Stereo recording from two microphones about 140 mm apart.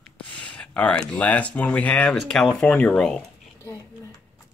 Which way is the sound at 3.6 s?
20° left (ahead or behind).